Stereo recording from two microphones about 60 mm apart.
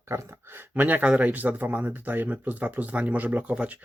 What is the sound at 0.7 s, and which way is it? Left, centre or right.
Speech, right.